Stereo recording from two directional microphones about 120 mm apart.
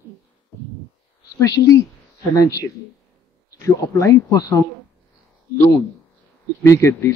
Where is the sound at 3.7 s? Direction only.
25° left (ahead or behind).